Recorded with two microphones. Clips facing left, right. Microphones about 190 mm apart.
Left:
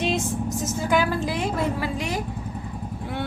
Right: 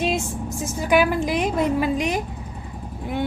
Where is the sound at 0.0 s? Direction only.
15° right (ahead or behind).